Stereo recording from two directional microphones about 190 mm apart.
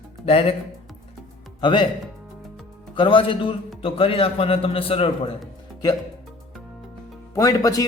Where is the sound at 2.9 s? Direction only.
25° left (ahead or behind).